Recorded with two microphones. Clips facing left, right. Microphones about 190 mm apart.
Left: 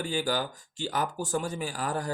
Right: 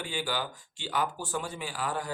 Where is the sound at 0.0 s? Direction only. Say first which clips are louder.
Left 4 dB; 40° left (ahead or behind).